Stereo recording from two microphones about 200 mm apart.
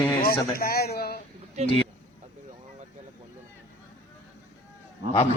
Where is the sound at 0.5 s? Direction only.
50° left (ahead or behind).